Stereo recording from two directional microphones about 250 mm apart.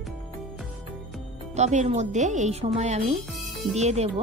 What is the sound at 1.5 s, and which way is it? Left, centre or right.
A woman's voice, right.